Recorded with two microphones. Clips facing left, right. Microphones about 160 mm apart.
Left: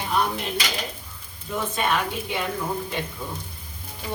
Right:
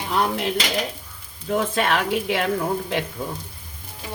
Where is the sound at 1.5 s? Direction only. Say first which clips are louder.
Right 3 dB; 90° right.